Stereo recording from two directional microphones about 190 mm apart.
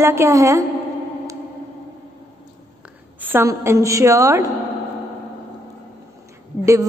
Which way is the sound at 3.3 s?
15° right (ahead or behind).